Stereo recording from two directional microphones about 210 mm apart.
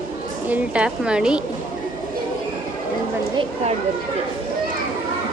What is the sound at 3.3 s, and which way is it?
Speech, 30° right (ahead or behind).